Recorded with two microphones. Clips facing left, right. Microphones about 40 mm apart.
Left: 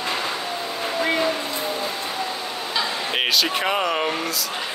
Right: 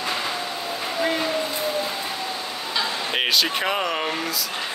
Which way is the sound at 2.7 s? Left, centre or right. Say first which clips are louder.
Even; centre.